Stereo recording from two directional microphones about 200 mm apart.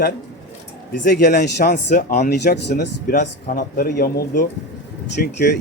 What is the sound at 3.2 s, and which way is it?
Speech, 45° left (ahead or behind).